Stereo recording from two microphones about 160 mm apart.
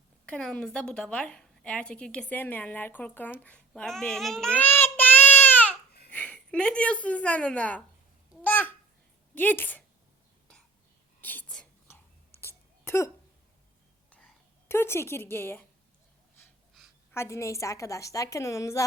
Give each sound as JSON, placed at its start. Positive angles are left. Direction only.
{"t": 0.3, "sound": "a woman's voice", "side_deg": 5}
{"t": 3.4, "sound": "child singing", "side_deg": 5}
{"t": 6.1, "sound": "a woman's voice", "side_deg": 10}
{"t": 8.4, "sound": "babbling", "side_deg": 10}
{"t": 9.3, "sound": "speech", "side_deg": 10}
{"t": 11.2, "sound": "whispering", "side_deg": 10}
{"t": 12.4, "sound": "a sound", "side_deg": 15}
{"t": 14.1, "sound": "a sound", "side_deg": 5}
{"t": 17.1, "sound": "a woman's voice", "side_deg": 15}